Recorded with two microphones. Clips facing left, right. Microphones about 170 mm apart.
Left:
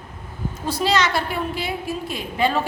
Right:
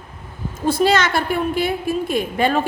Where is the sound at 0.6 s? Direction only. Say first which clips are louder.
Right 4 dB; 50° right (ahead or behind).